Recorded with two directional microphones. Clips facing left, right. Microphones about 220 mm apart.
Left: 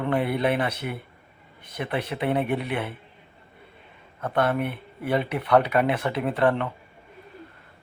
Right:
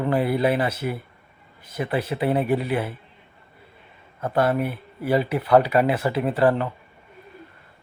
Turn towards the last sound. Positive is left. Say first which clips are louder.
# right 3 dB
turn(degrees=-5)  # may be behind; listen again after turning